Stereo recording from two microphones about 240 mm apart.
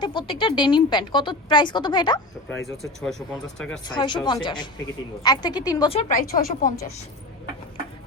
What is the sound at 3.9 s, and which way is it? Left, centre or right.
A woman's voice, centre.